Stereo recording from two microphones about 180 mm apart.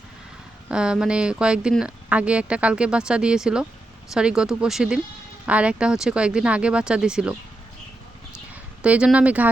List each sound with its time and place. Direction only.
0.7 s speech: 5° right (ahead or behind)
8.8 s speech: 5° right (ahead or behind)